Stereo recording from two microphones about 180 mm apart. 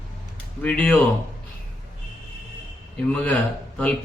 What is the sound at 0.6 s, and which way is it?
Speech, 5° left (ahead or behind).